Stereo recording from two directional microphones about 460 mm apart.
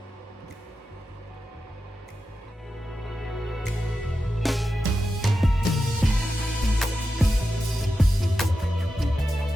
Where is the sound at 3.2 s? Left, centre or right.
Centre.